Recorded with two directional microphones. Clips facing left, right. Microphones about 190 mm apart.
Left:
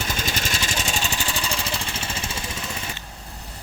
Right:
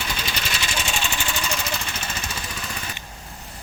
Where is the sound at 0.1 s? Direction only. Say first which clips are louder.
Left 2 dB; 45° left (ahead or behind); by 2.4 s 25° left (ahead or behind).